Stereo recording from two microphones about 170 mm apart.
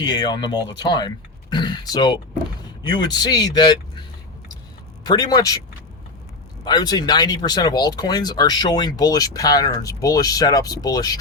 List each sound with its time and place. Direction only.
0.0 s speech: 25° left (ahead or behind)
5.0 s speech: 20° left (ahead or behind)
6.7 s speech: 25° left (ahead or behind)